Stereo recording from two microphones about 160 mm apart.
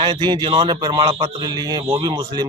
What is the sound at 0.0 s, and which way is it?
Speech, 30° right (ahead or behind).